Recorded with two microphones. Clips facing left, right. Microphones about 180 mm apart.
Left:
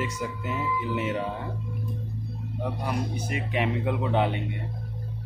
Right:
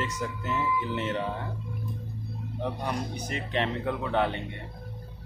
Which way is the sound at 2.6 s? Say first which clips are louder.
Left 1 dB; 5° left (ahead or behind).